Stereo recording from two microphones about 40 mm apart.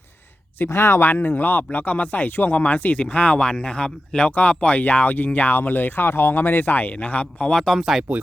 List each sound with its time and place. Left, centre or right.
0.6 s speech: left
1.1 s speech: left
4.3 s speech: left
6.9 s speech: left
8.1 s speech: right